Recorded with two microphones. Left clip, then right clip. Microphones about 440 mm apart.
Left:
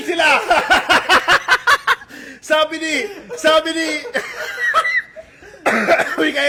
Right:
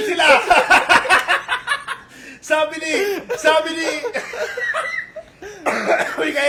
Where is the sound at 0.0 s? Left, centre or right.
Centre.